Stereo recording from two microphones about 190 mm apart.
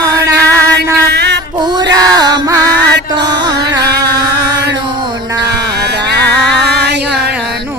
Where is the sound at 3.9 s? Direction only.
60° right (ahead or behind).